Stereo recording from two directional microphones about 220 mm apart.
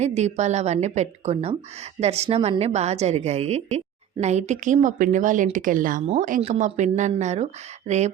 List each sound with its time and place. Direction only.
0.0 s a woman's voice: 30° right (ahead or behind)